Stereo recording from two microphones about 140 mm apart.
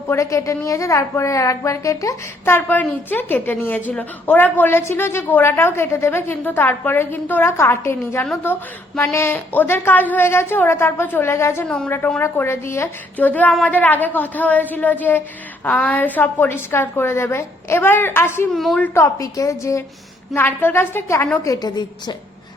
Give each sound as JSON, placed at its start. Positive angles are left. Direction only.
{"t": 0.1, "sound": "a woman's voice", "side_deg": 20}
{"t": 18.5, "sound": "a woman's voice", "side_deg": 0}
{"t": 18.9, "sound": "a woman's voice", "side_deg": 25}